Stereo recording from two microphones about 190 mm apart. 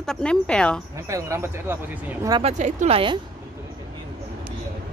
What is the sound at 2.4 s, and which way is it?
Speech, 40° right (ahead or behind).